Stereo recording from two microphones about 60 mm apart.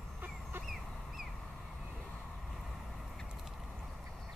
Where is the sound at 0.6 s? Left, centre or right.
Centre.